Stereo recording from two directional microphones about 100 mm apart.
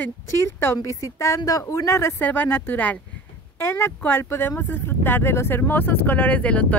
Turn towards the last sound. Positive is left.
turn(degrees=15)  # may be behind; listen again after turning